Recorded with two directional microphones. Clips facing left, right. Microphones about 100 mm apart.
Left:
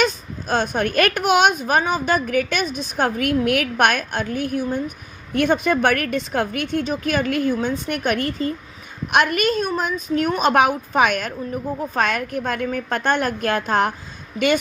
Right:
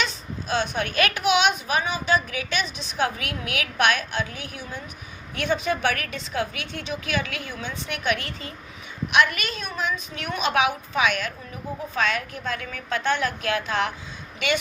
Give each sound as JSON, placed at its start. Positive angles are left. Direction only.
{"t": 0.0, "sound": "speech", "side_deg": 45}